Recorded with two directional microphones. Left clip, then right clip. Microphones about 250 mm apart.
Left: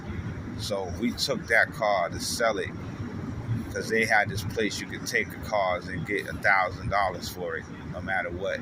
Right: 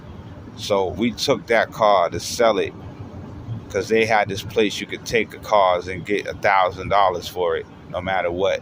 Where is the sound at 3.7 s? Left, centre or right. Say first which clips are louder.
Right 6 dB; right.